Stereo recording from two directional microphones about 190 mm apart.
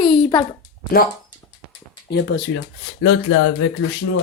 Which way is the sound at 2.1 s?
65° left (ahead or behind).